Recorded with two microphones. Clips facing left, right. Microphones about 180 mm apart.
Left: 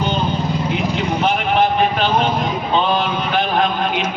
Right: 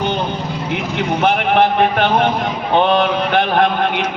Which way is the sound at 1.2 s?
60° right (ahead or behind).